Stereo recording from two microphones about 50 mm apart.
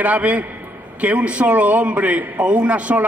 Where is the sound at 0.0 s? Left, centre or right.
Right.